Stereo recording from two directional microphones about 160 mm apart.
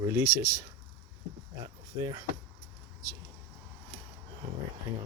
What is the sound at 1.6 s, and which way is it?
Speech, 25° right (ahead or behind).